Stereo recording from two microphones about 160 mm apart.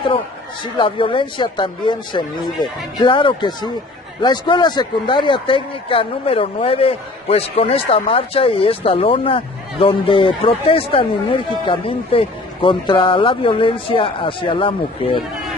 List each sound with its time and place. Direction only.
0.7 s speech: 35° left (ahead or behind)